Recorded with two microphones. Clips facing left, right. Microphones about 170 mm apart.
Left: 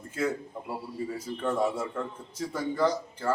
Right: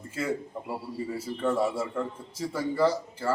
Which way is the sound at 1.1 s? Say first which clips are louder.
Right 3 dB; 5° right (ahead or behind).